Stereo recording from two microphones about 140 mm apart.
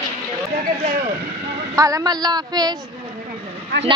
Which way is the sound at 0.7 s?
75° right (ahead or behind).